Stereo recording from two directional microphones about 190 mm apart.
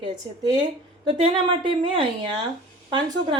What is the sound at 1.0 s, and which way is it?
A woman's voice, 25° right (ahead or behind).